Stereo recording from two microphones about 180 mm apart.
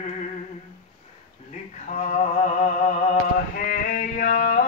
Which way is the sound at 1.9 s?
40° left (ahead or behind).